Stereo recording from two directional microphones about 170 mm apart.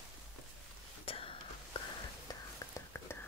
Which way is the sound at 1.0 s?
35° left (ahead or behind).